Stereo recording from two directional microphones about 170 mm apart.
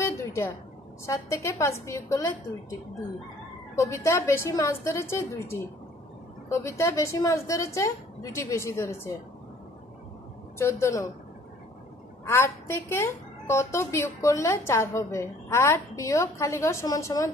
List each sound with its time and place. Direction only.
0.0 s a sound: 15° left (ahead or behind)
1.0 s a woman's voice: 15° left (ahead or behind)
3.7 s a woman's voice: 15° left (ahead or behind)
10.6 s a woman's voice: 15° left (ahead or behind)
12.3 s a woman's voice: 15° left (ahead or behind)